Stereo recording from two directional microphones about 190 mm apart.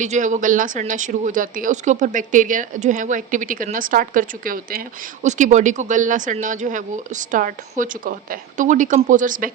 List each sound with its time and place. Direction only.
0.0 s speech: 40° right (ahead or behind)